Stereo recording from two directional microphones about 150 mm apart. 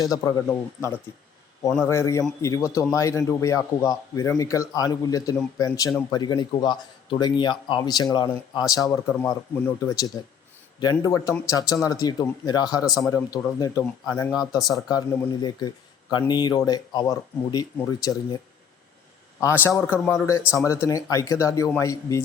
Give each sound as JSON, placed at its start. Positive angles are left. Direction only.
{"t": 0.0, "sound": "a man's voice", "side_deg": 25}
{"t": 19.4, "sound": "speech", "side_deg": 15}